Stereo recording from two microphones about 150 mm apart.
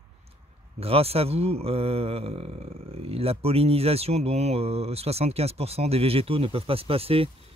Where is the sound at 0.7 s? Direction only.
40° right (ahead or behind).